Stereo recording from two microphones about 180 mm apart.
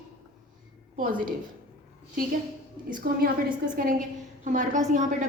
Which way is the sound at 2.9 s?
55° right (ahead or behind).